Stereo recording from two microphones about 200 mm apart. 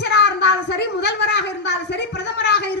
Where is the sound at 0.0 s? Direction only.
55° left (ahead or behind).